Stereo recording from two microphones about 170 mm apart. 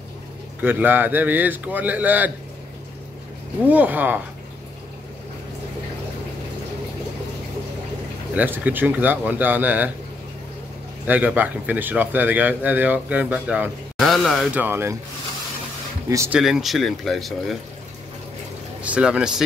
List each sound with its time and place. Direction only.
0.6 s speech: 10° right (ahead or behind)
3.6 s speech: 10° right (ahead or behind)
8.4 s speech: 10° right (ahead or behind)
11.1 s speech: 10° right (ahead or behind)
16.1 s speech: 15° right (ahead or behind)
16.3 s speech: centre (ahead or behind)
18.8 s speech: 5° right (ahead or behind)